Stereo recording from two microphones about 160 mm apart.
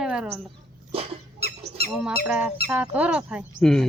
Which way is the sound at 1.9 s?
5° right (ahead or behind).